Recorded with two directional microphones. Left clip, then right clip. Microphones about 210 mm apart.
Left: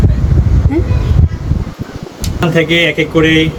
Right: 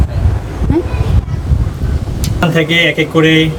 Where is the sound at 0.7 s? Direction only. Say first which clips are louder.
Right 2 dB; 5° right (ahead or behind).